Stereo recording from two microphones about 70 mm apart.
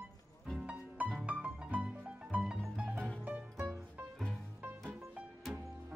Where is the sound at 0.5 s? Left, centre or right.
Centre.